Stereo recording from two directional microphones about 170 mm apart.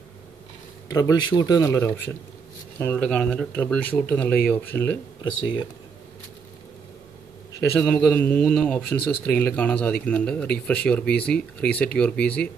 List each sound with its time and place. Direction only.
0.8 s speech: 20° left (ahead or behind)
5.2 s speech: 25° left (ahead or behind)
7.7 s speech: 10° left (ahead or behind)